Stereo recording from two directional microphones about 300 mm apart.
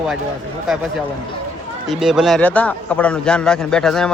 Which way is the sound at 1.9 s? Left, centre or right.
Centre.